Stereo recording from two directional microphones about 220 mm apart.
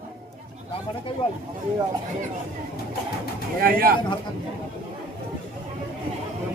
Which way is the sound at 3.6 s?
40° right (ahead or behind).